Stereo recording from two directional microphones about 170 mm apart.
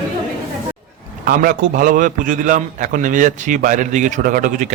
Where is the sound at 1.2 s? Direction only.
55° right (ahead or behind).